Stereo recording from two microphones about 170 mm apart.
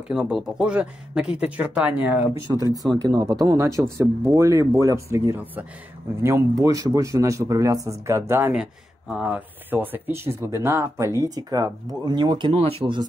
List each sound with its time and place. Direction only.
0.1 s speech: 5° right (ahead or behind); by 13.0 s 30° right (ahead or behind)